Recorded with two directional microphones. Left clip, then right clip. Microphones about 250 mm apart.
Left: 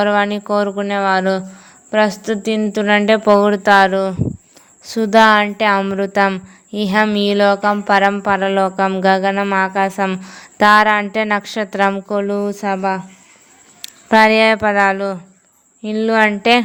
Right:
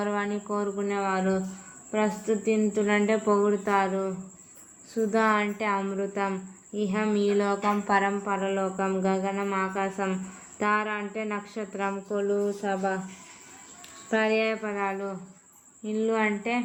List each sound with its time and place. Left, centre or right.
0.0 s a woman's voice: left